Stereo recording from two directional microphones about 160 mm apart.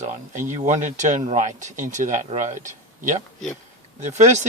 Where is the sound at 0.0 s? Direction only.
50° right (ahead or behind).